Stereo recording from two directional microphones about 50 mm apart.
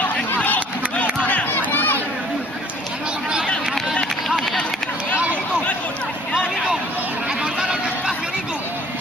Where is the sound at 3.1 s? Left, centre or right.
Centre.